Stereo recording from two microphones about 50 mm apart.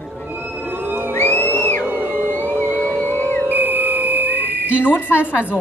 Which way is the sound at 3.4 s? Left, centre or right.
Right.